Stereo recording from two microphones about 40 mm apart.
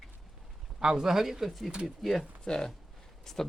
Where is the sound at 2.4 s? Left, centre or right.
Centre.